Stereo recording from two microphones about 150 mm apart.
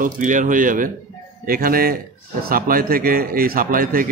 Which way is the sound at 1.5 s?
75° right (ahead or behind).